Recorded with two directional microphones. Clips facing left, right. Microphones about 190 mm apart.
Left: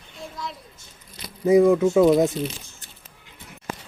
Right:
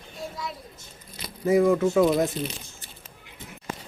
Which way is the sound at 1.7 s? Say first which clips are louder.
Left 4 dB; 15° left (ahead or behind).